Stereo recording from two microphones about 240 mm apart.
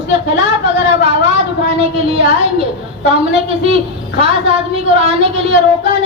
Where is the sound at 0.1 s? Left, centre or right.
Right.